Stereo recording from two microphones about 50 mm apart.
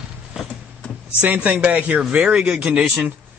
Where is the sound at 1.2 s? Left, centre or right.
Right.